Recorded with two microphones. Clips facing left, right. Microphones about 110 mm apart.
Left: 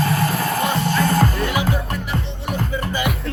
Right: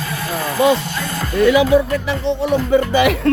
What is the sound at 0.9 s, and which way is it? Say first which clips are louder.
Music: left 7 dB; 45° left (ahead or behind).